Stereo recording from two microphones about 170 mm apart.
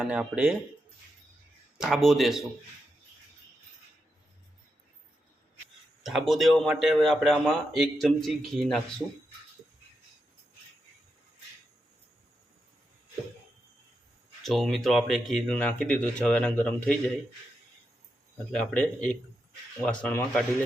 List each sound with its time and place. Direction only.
0.0 s speech: 5° right (ahead or behind)
1.8 s speech: centre (ahead or behind)
6.0 s speech: centre (ahead or behind)
14.4 s speech: centre (ahead or behind)
18.5 s speech: 5° left (ahead or behind)